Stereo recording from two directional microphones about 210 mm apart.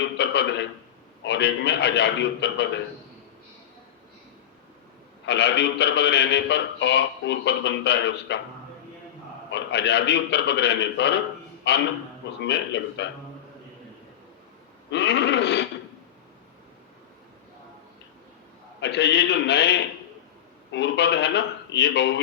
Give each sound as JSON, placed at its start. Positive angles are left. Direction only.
{"t": 0.2, "sound": "a man's voice", "side_deg": 55}
{"t": 5.2, "sound": "a man's voice", "side_deg": 55}
{"t": 9.5, "sound": "a man's voice", "side_deg": 55}
{"t": 14.8, "sound": "a man's voice", "side_deg": 55}
{"t": 18.8, "sound": "a man's voice", "side_deg": 55}
{"t": 20.7, "sound": "a man's voice", "side_deg": 55}